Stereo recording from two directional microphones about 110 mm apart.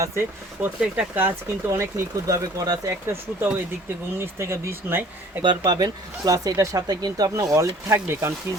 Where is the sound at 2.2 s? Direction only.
30° right (ahead or behind).